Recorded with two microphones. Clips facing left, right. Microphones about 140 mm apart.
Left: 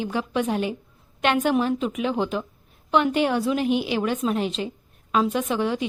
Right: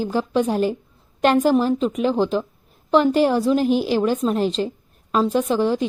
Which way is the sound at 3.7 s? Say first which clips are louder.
Right 4 dB; 35° right (ahead or behind).